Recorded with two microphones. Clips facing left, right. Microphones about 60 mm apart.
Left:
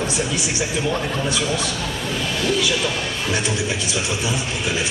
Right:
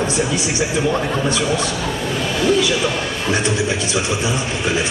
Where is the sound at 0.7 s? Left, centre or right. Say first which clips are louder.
Right 4 dB; centre.